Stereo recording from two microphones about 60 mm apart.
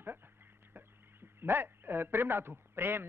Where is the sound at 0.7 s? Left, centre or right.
Right.